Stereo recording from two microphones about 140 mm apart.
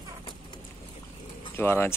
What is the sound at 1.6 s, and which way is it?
Speech, 15° left (ahead or behind).